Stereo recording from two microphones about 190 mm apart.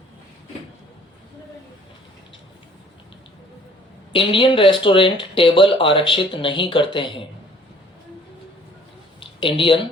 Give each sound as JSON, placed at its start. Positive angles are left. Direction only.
{"t": 4.1, "sound": "speech", "side_deg": 25}
{"t": 9.2, "sound": "speech", "side_deg": 25}